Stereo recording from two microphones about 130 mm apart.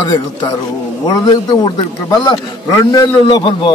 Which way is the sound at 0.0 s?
35° left (ahead or behind).